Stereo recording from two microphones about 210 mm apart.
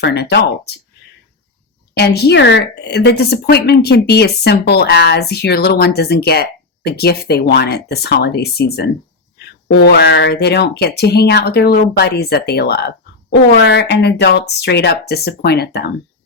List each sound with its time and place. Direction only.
0.0 s speech: 55° left (ahead or behind)
2.0 s speech: 50° left (ahead or behind)